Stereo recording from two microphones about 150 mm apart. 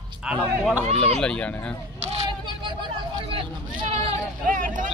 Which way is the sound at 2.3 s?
30° right (ahead or behind).